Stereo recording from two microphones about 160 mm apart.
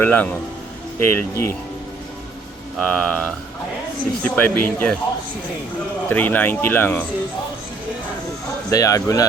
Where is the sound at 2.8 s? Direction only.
5° left (ahead or behind).